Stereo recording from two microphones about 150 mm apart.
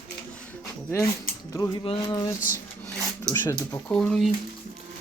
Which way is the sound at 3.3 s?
20° left (ahead or behind).